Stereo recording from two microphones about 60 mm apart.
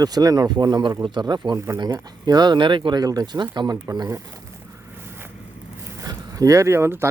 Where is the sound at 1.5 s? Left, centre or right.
Right.